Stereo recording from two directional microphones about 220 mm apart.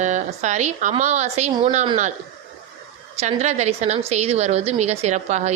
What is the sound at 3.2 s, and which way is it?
Speech, 30° right (ahead or behind).